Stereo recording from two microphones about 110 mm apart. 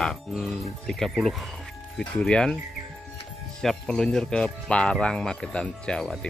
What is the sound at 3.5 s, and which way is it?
Speech, 5° left (ahead or behind).